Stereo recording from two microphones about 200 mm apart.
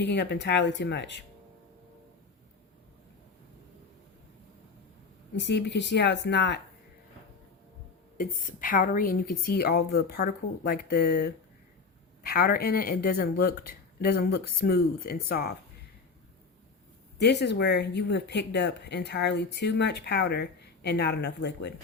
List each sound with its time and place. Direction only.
0.0 s speech: 60° left (ahead or behind)
5.4 s speech: 60° left (ahead or behind)
8.2 s a woman's voice: 45° left (ahead or behind)
17.2 s speech: 60° left (ahead or behind)